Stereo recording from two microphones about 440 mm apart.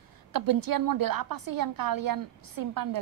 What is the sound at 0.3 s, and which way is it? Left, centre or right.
A woman's voice, right.